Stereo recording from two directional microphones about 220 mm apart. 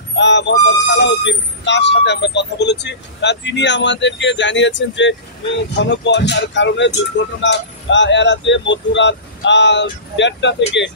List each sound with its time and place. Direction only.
0.1 s speech: 55° left (ahead or behind)